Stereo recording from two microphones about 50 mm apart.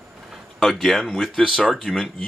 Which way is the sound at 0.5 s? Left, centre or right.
Centre.